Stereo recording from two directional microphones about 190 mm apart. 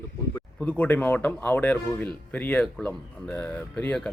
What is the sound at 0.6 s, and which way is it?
Speech, 5° left (ahead or behind).